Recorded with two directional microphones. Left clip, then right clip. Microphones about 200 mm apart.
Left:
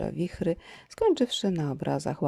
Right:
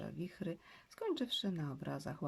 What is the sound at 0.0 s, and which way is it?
Speech, 35° left (ahead or behind).